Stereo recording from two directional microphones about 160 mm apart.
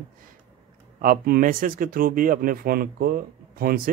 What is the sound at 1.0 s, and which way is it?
Speech, 70° right (ahead or behind).